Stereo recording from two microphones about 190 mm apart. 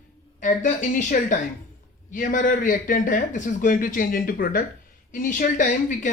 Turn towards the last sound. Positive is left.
turn(degrees=40)  # may be behind; listen again after turning